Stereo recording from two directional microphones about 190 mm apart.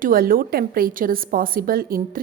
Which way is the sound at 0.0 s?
50° right (ahead or behind).